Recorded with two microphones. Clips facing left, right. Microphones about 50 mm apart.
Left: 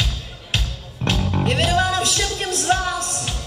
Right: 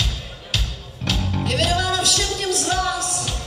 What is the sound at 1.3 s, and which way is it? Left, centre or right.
Music, left.